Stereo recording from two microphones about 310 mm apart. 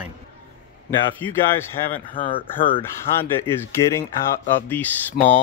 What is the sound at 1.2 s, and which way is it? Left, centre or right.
Speech, centre.